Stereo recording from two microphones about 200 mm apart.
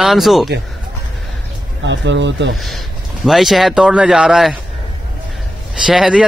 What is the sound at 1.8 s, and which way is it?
Speech, 65° right (ahead or behind).